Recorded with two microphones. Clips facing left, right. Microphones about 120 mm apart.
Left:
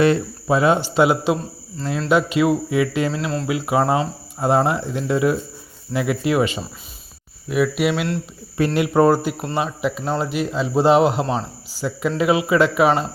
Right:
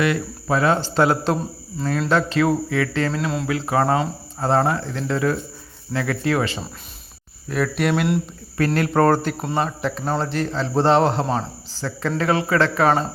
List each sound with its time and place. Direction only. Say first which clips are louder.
0.4 s a man's voice: left 2 dB; 15° left (ahead or behind)
3.1 s cricket: even; centre (ahead or behind)
3.4 s a man's voice: left 2 dB; 15° left (ahead or behind)